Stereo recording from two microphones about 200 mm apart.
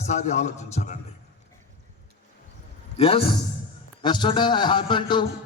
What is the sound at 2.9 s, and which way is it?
A man's voice, 30° left (ahead or behind).